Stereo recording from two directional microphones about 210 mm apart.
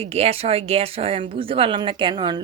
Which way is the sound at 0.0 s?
30° right (ahead or behind).